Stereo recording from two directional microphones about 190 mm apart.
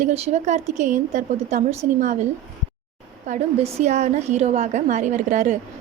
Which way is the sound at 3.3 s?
35° right (ahead or behind).